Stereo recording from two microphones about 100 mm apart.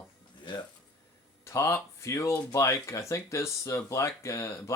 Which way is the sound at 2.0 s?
30° left (ahead or behind).